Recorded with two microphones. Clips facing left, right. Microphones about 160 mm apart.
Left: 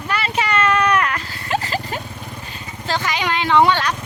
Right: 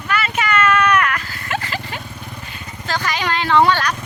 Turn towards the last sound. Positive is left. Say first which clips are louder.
# even
turn(degrees=20)  # may be behind; listen again after turning